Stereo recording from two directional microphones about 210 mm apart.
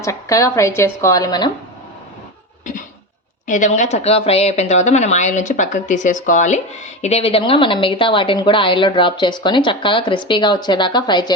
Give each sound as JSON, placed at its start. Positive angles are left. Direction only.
{"t": 0.0, "sound": "a woman's voice", "side_deg": 15}
{"t": 3.4, "sound": "speech", "side_deg": 35}